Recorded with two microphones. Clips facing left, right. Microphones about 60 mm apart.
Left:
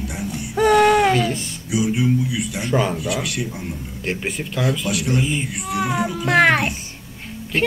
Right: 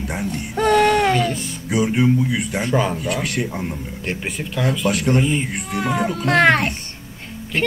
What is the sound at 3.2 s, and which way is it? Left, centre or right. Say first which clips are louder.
Speech: right 3 dB; right.